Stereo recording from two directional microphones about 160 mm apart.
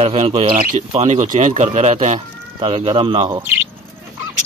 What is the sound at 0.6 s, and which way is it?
Speech, 65° right (ahead or behind).